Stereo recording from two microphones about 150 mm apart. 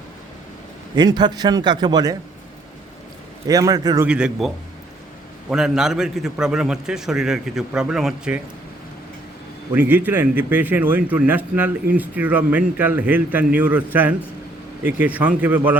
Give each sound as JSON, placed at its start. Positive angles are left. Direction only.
{"t": 0.9, "sound": "a man's voice", "side_deg": -30}
{"t": 3.4, "sound": "a man's voice", "side_deg": -25}
{"t": 4.0, "sound": "a man's voice", "side_deg": -5}
{"t": 9.7, "sound": "speech", "side_deg": -10}